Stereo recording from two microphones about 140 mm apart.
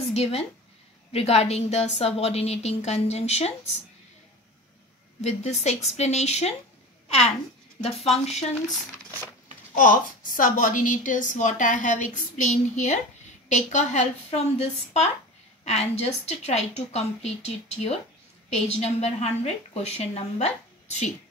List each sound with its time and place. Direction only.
0.1 s a woman's voice: 45° left (ahead or behind)
5.2 s a woman's voice: 50° left (ahead or behind)
9.8 s a woman's voice: 75° left (ahead or behind); by 21.1 s 55° left (ahead or behind)